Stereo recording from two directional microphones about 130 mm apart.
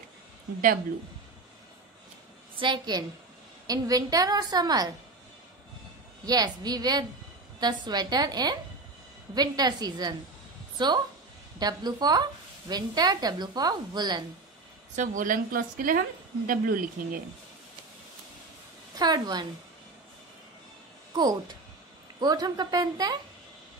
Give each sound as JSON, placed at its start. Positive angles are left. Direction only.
{"t": 2.5, "sound": "a woman's voice", "side_deg": -40}
{"t": 6.2, "sound": "speech", "side_deg": -30}
{"t": 15.0, "sound": "a woman's voice", "side_deg": -90}
{"t": 18.9, "sound": "speech", "side_deg": -30}
{"t": 21.1, "sound": "speech", "side_deg": -35}